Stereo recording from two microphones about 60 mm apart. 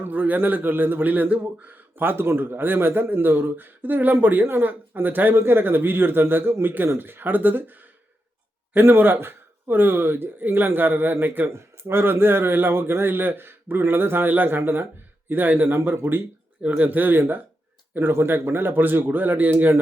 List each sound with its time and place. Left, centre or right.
0.0 s speech: right
16.6 s speech: right